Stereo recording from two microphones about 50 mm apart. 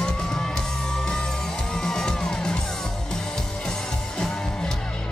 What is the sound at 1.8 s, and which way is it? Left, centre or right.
Music, centre.